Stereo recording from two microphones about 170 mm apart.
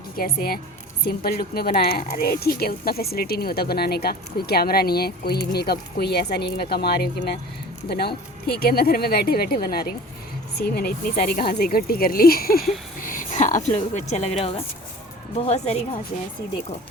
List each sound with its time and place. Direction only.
0.2 s a woman's voice: 65° left (ahead or behind); by 15.8 s 40° left (ahead or behind)